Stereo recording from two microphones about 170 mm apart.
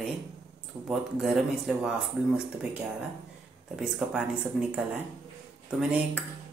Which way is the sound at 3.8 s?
Centre (ahead or behind).